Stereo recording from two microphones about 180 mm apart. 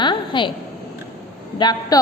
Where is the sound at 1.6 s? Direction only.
20° left (ahead or behind).